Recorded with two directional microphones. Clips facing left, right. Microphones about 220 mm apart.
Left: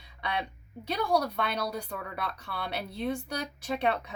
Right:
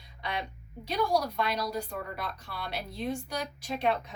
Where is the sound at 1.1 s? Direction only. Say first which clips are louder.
Left 1 dB; 60° left (ahead or behind).